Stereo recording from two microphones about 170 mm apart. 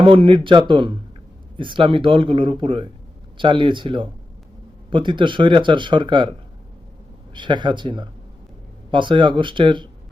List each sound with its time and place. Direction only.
0.0 s speech: 30° right (ahead or behind)
7.3 s speech: 25° right (ahead or behind)